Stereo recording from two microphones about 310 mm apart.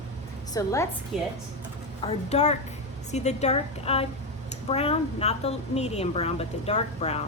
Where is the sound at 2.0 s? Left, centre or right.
Left.